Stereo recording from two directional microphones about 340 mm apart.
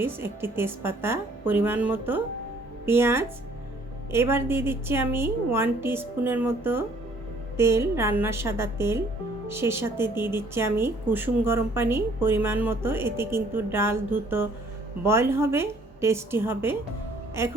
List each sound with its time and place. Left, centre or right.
0.0 s a woman's voice: centre